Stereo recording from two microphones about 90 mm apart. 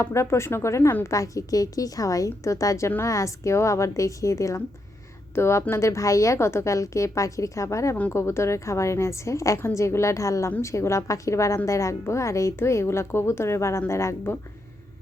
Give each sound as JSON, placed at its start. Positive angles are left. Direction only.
{"t": 0.0, "sound": "a woman's voice", "side_deg": 30}